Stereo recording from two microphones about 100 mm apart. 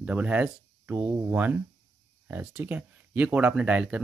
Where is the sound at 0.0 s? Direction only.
15° right (ahead or behind).